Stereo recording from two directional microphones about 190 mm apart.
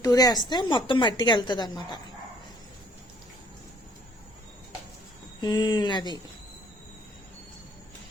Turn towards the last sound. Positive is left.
turn(degrees=25)  # may be behind; listen again after turning